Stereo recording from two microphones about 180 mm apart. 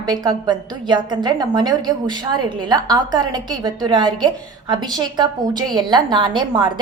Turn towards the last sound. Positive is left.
turn(degrees=-25)  # may be behind; listen again after turning